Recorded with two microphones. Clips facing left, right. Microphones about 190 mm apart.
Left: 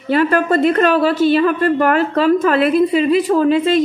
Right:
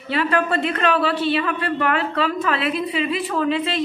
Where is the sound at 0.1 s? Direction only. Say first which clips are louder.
Left 6 dB; 45° left (ahead or behind).